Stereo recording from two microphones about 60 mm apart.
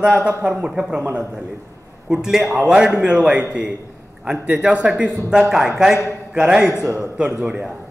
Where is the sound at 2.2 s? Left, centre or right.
Centre.